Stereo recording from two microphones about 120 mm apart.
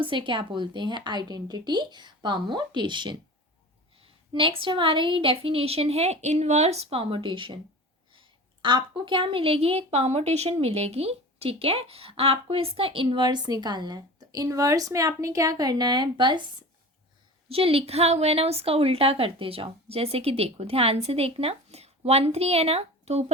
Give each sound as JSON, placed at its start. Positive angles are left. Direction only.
{"t": 0.0, "sound": "a woman's voice", "side_deg": -45}
{"t": 17.5, "sound": "a woman's voice", "side_deg": -55}